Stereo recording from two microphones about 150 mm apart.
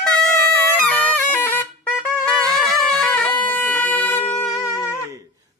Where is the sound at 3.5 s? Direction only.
10° left (ahead or behind).